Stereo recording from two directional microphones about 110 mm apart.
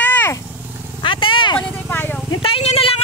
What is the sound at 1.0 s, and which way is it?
Vehicle, 50° left (ahead or behind).